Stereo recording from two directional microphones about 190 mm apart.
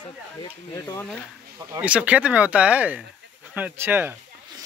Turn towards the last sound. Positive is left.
turn(degrees=-10)  # may be behind; listen again after turning